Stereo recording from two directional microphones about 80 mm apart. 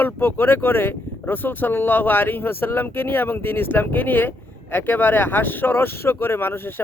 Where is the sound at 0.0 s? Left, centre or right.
Left.